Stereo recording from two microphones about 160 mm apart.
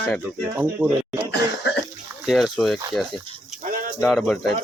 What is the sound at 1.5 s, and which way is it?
Cough, 90° left.